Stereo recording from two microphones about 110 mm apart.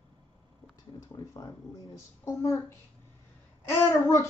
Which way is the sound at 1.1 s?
35° left (ahead or behind).